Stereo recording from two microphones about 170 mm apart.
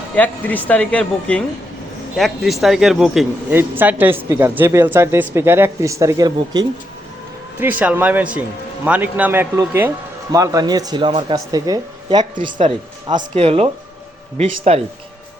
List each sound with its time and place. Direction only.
0.2 s speech: 10° left (ahead or behind)
3.5 s speech: 10° right (ahead or behind)
7.6 s speech: 10° right (ahead or behind); by 14.8 s 35° right (ahead or behind)